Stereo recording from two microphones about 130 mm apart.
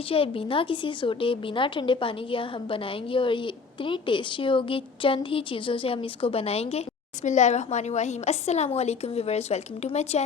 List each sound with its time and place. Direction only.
0.1 s a woman's voice: 45° left (ahead or behind)
7.3 s a woman's voice: 65° left (ahead or behind)